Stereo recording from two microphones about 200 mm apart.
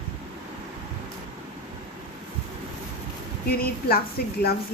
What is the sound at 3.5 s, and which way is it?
Speech, 50° left (ahead or behind).